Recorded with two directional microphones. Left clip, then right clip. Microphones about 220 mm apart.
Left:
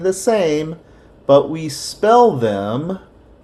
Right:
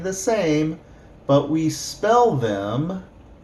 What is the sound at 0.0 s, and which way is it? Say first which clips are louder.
Speech: left 6 dB; 40° left (ahead or behind).